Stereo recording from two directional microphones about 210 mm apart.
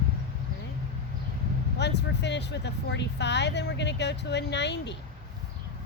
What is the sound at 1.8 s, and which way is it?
Speech, 55° left (ahead or behind).